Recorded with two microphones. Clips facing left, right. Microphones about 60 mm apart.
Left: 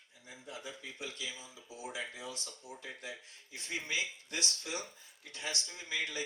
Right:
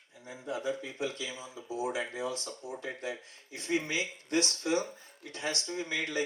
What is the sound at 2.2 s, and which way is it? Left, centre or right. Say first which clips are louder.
Speech: right 9 dB; right.